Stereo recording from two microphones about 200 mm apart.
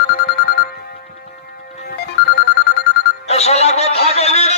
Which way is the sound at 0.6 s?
50° left (ahead or behind).